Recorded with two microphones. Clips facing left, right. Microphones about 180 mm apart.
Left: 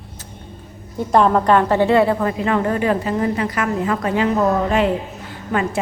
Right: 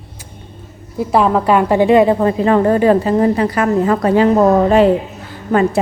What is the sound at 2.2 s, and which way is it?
A woman's voice, 35° right (ahead or behind).